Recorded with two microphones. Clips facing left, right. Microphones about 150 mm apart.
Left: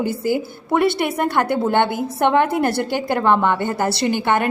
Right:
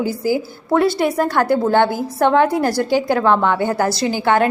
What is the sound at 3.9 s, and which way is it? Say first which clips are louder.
Speech: even; 60° left (ahead or behind).